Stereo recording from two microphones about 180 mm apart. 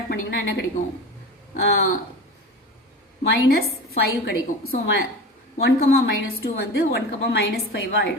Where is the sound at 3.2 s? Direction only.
60° left (ahead or behind).